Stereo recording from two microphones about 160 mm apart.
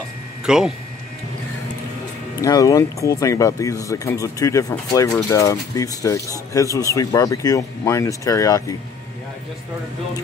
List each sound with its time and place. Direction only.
0.5 s speech: 5° right (ahead or behind)
2.4 s speech: 20° left (ahead or behind)